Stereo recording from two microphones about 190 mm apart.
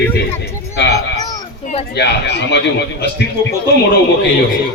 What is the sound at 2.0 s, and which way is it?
Speech, 60° left (ahead or behind).